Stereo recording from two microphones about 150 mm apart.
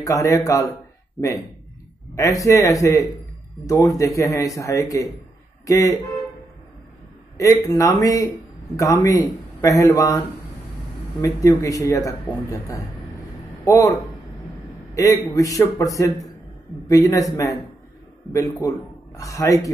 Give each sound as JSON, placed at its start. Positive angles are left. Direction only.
{"t": 0.0, "sound": "speech", "side_deg": 20}
{"t": 2.1, "sound": "speech", "side_deg": 20}
{"t": 7.3, "sound": "a man's voice", "side_deg": 20}